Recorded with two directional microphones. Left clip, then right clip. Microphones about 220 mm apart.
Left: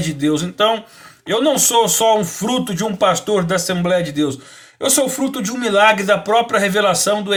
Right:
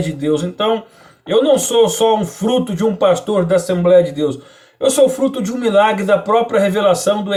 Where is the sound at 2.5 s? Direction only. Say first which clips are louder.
Right 5 dB; 15° left (ahead or behind).